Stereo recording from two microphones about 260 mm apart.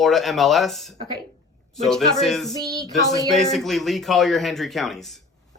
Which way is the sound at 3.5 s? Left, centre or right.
Centre.